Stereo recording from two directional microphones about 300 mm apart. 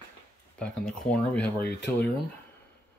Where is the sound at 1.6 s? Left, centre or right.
Left.